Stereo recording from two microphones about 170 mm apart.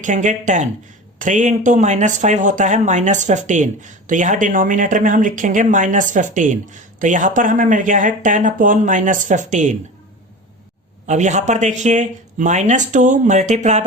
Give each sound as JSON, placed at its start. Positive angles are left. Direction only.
{"t": 0.0, "sound": "speech", "side_deg": -50}
{"t": 11.0, "sound": "speech", "side_deg": -45}